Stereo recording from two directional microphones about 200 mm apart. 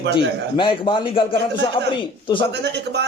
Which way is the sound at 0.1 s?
25° left (ahead or behind).